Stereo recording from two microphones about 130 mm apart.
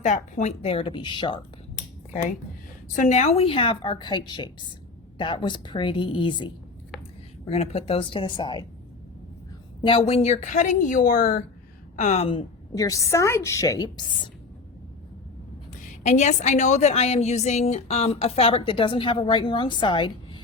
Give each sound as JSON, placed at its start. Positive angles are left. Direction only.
{"t": 0.0, "sound": "a woman's voice", "side_deg": 65}
{"t": 3.0, "sound": "a woman's voice", "side_deg": 60}
{"t": 7.5, "sound": "a woman's voice", "side_deg": 50}
{"t": 9.8, "sound": "a woman's voice", "side_deg": 45}
{"t": 11.9, "sound": "a woman's voice", "side_deg": 60}
{"t": 12.7, "sound": "a woman's voice", "side_deg": 25}
{"t": 16.0, "sound": "a woman's voice", "side_deg": 65}